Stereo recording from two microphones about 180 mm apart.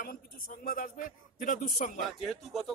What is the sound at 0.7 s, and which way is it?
Speech, 50° left (ahead or behind).